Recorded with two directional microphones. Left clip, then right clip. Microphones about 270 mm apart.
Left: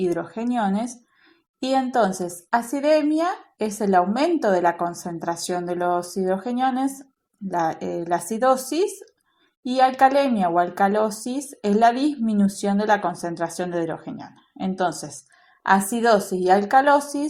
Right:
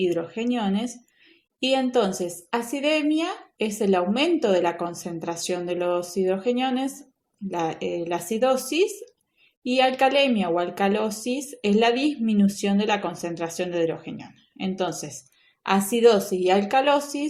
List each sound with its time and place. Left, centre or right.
0.0 s a woman's voice: centre